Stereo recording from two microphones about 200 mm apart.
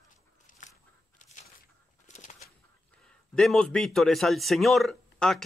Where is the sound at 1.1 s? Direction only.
40° left (ahead or behind).